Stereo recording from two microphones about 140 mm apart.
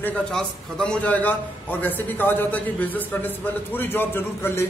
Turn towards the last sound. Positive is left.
turn(degrees=15)  # may be behind; listen again after turning